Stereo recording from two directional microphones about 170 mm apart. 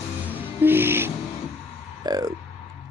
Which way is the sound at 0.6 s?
10° right (ahead or behind).